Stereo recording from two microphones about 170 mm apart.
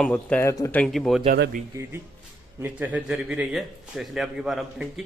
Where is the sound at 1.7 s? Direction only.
20° right (ahead or behind); by 4.9 s centre (ahead or behind).